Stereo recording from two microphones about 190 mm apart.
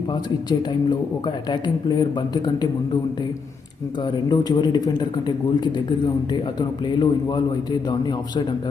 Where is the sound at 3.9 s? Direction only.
25° left (ahead or behind).